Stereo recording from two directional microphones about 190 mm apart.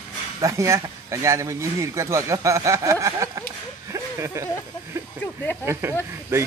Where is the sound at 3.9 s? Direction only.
15° right (ahead or behind).